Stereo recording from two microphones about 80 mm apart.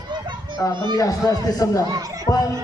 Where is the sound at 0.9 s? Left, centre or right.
Left.